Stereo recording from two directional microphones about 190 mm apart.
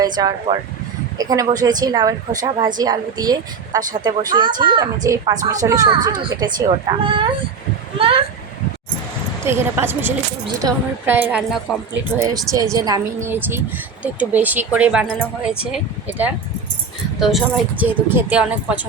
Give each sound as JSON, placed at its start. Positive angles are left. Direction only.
{"t": 0.2, "sound": "speech", "side_deg": -20}
{"t": 9.4, "sound": "a woman's voice", "side_deg": -15}
{"t": 12.2, "sound": "a woman's voice", "side_deg": -20}